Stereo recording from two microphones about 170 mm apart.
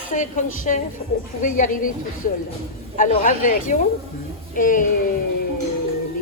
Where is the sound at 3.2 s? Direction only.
50° left (ahead or behind).